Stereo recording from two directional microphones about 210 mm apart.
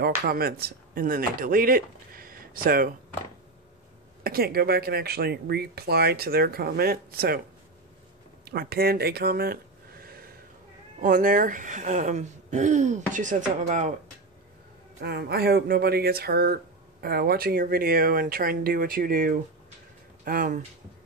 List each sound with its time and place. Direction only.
0.2 s speech: 45° right (ahead or behind)
4.2 s speech: 45° right (ahead or behind)
8.5 s speech: 45° right (ahead or behind)
15.0 s speech: 50° right (ahead or behind)